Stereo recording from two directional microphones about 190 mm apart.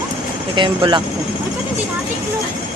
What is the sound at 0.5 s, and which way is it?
Speech, 25° right (ahead or behind).